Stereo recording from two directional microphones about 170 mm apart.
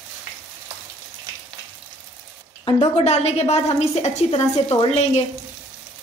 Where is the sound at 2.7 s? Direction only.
35° left (ahead or behind).